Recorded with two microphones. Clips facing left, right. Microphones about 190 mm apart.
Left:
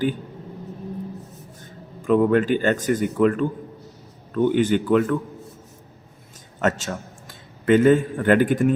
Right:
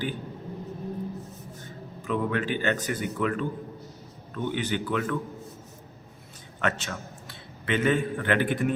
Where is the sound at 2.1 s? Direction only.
45° left (ahead or behind).